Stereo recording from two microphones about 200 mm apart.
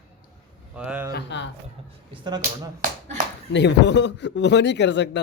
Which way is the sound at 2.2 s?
20° right (ahead or behind).